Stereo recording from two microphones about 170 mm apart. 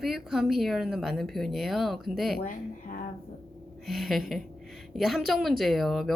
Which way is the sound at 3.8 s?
Centre (ahead or behind).